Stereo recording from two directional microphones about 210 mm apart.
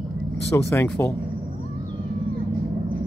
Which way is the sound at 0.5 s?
15° left (ahead or behind).